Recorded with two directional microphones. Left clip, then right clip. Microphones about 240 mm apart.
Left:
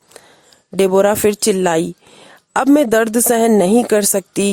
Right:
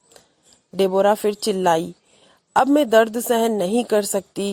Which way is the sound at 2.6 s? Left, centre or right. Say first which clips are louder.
Left 2 dB; left.